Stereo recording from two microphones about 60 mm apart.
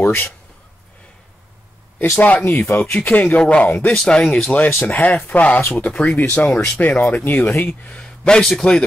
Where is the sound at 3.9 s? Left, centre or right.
Centre; by 7.9 s left.